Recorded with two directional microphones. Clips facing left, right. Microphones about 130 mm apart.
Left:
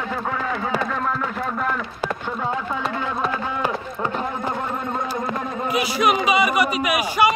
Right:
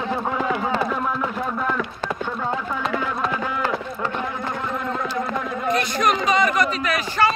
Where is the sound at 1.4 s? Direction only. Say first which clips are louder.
Right 1 dB; centre (ahead or behind).